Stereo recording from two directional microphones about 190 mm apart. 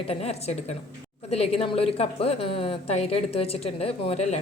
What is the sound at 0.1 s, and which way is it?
A woman's voice, 35° left (ahead or behind).